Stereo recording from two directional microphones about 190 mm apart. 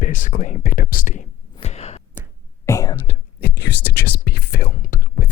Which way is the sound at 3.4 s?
60° left (ahead or behind).